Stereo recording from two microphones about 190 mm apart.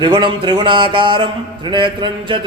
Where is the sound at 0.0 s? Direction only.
25° right (ahead or behind).